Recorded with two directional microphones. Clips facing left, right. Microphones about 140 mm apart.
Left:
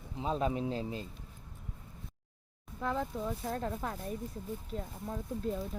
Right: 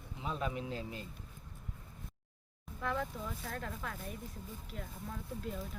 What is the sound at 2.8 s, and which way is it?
Speech, 25° left (ahead or behind).